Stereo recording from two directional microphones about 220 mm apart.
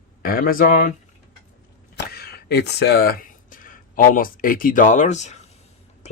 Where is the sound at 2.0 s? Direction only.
45° left (ahead or behind).